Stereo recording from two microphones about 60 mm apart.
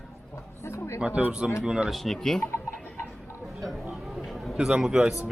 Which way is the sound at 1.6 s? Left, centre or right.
Centre.